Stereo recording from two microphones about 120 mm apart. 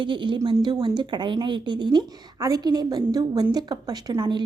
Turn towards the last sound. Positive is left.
turn(degrees=-35)  # may be behind; listen again after turning